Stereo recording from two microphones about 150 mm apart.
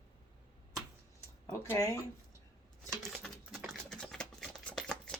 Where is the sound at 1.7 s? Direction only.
20° left (ahead or behind).